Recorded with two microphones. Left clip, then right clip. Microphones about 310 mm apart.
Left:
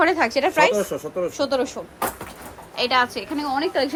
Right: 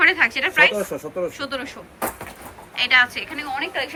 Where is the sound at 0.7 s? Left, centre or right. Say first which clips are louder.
Left 2 dB; centre.